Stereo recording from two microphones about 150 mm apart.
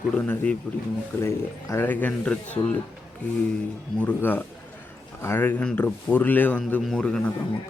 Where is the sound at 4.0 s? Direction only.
10° left (ahead or behind).